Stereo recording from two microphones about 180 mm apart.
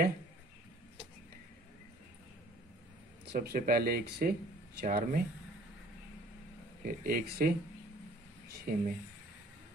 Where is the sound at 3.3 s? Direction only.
55° right (ahead or behind).